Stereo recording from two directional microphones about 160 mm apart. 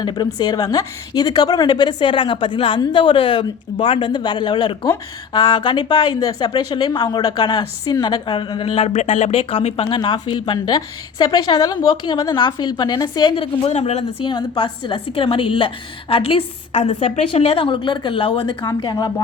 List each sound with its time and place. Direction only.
0.0 s a woman's voice: 25° left (ahead or behind); by 14.0 s 45° left (ahead or behind)
14.3 s a woman's voice: 30° left (ahead or behind)